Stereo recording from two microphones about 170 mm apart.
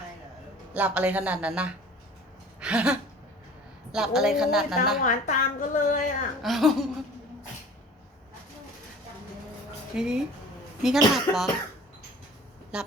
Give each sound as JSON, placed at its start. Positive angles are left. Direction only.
{"t": 0.7, "sound": "speech", "side_deg": -5}
{"t": 5.0, "sound": "a woman's voice", "side_deg": 50}
{"t": 6.4, "sound": "speech", "side_deg": 0}
{"t": 9.9, "sound": "speech", "side_deg": -5}
{"t": 12.7, "sound": "speech", "side_deg": -5}